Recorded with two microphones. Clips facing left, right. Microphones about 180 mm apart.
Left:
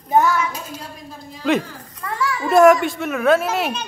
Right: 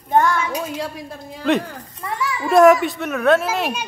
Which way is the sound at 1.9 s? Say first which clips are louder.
Left 4 dB; 20° right (ahead or behind).